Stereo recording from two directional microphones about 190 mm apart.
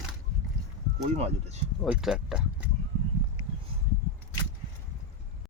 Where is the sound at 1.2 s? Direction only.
30° right (ahead or behind).